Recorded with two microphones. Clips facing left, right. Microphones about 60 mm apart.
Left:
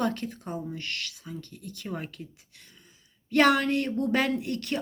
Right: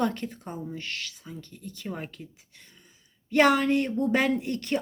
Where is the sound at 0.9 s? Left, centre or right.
Centre.